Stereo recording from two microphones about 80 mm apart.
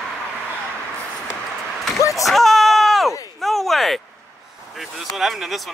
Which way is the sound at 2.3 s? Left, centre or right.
Centre.